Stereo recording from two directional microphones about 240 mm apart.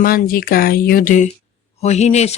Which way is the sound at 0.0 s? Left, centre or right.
Left.